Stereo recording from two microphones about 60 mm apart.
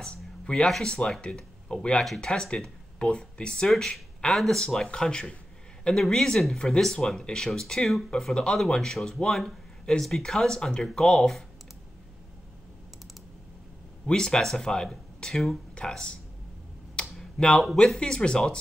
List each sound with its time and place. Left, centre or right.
0.0 s a sound: centre
0.8 s speech: centre
3.7 s speech: centre
14.0 s speech: centre
17.0 s computer keyboard: centre
17.4 s speech: centre